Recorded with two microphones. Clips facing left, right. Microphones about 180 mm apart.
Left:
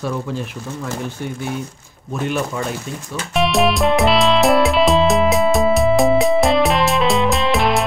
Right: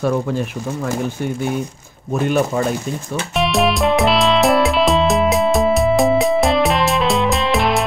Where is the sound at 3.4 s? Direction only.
Centre (ahead or behind).